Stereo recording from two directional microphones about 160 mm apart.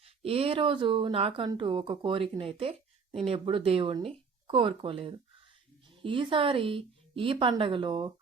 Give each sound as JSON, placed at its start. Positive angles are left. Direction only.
{"t": 0.0, "sound": "a woman's voice", "side_deg": -35}